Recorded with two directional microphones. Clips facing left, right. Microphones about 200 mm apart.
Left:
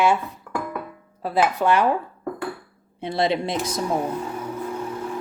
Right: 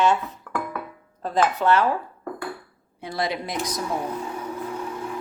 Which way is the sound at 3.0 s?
25° left (ahead or behind).